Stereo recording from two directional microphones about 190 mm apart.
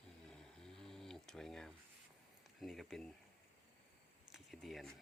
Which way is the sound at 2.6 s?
Centre (ahead or behind).